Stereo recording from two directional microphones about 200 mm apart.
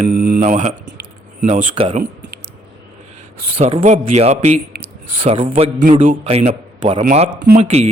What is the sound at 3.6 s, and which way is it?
A man's voice, 30° right (ahead or behind).